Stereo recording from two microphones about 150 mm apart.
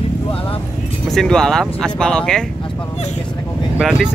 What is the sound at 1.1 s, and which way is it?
Speech, 5° left (ahead or behind).